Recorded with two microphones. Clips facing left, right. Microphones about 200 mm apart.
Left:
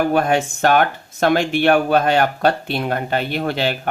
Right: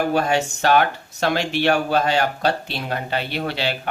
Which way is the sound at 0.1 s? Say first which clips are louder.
Left 3 dB; 55° left (ahead or behind).